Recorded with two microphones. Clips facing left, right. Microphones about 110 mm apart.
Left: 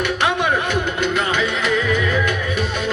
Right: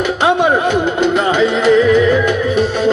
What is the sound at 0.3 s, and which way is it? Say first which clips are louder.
Music: right 11 dB; 25° right (ahead or behind).